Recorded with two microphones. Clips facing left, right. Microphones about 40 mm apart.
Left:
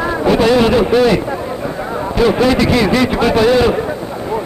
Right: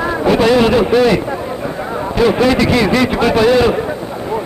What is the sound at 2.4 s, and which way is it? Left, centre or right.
A man's voice, right.